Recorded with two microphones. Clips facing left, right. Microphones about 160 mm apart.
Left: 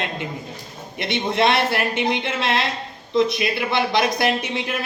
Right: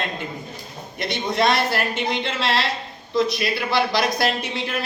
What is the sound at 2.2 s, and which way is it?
Speech, 20° left (ahead or behind).